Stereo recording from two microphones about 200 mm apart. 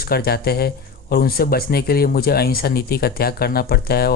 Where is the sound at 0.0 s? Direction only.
50° left (ahead or behind).